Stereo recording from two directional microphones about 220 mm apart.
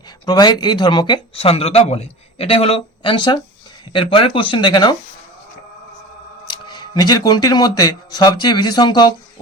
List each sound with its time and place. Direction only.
0.3 s speech: 20° left (ahead or behind)
6.5 s speech: 20° left (ahead or behind)